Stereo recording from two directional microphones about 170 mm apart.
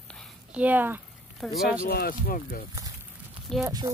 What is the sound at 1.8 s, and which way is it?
Speech, 60° left (ahead or behind).